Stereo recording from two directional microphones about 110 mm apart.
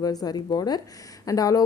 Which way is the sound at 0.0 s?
35° left (ahead or behind).